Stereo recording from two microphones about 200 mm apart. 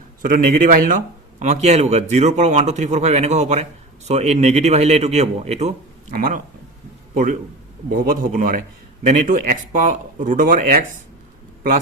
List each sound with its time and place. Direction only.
0.2 s a man's voice: 45° right (ahead or behind)
7.9 s speech: 45° right (ahead or behind)